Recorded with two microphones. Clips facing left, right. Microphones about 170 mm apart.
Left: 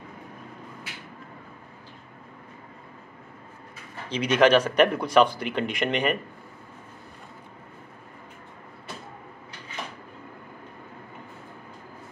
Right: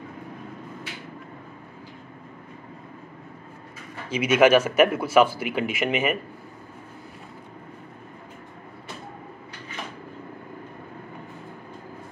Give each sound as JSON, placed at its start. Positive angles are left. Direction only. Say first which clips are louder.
{"t": 4.1, "sound": "speech", "louder": "right 2 dB", "side_deg": -10}